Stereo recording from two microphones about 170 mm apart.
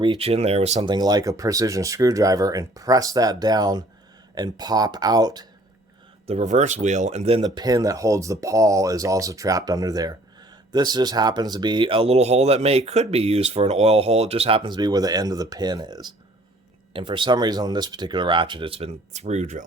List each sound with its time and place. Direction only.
0.0 s speech: 30° right (ahead or behind)
0.9 s speech: 25° right (ahead or behind)
6.2 s speech: 40° right (ahead or behind)
7.4 s speech: 25° right (ahead or behind); by 19.6 s 45° right (ahead or behind)